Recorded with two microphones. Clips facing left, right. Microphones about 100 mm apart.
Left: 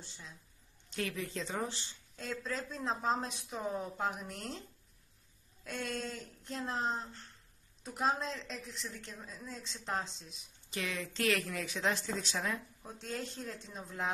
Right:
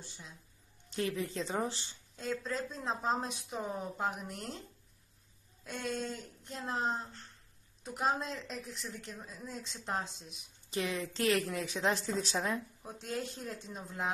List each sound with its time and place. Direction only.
0.9 s speech: 30° right (ahead or behind)
2.1 s a woman's voice: centre (ahead or behind)
10.7 s speech: 30° right (ahead or behind)
13.0 s speech: 5° right (ahead or behind)